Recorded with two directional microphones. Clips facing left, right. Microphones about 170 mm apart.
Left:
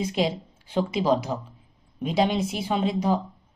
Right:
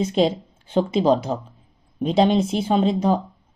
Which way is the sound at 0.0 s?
25° right (ahead or behind).